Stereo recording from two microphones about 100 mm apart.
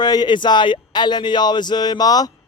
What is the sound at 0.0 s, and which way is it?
Speech, 45° left (ahead or behind).